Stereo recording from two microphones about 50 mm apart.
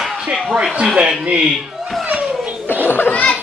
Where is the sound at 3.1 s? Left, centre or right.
Left.